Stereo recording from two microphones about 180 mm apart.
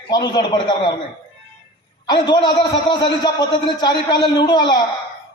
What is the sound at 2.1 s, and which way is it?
A man's voice, 25° left (ahead or behind).